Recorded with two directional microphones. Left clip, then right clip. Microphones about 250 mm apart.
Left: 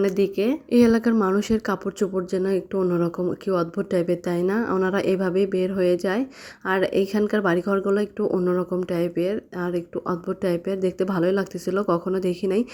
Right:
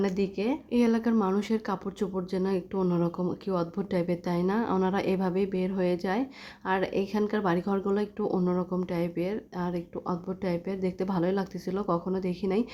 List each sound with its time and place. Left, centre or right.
0.0 s speech: centre